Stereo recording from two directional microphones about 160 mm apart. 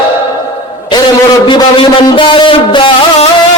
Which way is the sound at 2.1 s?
30° left (ahead or behind).